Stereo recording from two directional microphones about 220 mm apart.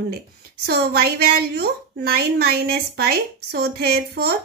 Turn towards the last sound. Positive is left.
turn(degrees=-45)  # may be behind; listen again after turning